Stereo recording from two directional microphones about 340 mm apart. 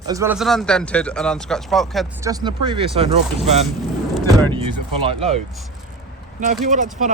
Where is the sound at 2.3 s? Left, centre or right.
Centre.